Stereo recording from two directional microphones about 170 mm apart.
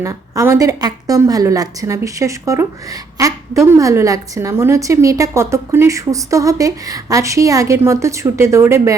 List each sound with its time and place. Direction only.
0.0 s a woman's voice: 20° right (ahead or behind)